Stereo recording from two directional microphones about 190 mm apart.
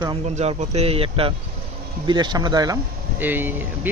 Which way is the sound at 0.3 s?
35° right (ahead or behind).